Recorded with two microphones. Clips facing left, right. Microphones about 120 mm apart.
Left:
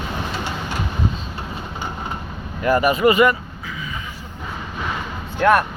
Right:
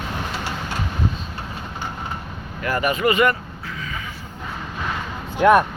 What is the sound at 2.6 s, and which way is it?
Speech, 15° left (ahead or behind).